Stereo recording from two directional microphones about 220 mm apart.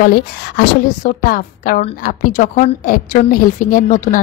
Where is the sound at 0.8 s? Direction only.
40° left (ahead or behind).